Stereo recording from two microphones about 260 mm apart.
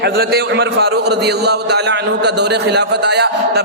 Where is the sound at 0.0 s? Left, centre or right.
Right.